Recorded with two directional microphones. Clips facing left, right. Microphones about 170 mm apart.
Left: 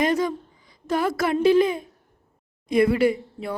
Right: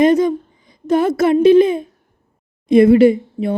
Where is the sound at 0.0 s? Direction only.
20° right (ahead or behind).